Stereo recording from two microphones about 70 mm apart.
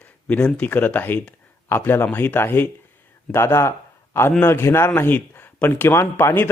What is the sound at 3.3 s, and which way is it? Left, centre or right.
Speech, left.